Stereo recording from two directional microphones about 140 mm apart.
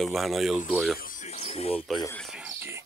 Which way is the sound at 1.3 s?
45° left (ahead or behind).